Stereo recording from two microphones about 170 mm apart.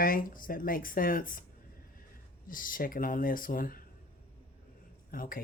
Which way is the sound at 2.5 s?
55° left (ahead or behind).